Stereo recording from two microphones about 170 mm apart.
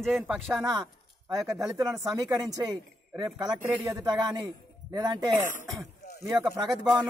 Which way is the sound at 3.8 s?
20° right (ahead or behind).